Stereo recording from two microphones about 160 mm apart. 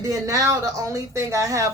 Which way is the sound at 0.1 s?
20° right (ahead or behind).